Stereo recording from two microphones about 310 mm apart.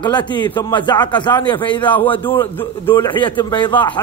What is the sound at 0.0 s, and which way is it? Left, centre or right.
Speech, centre.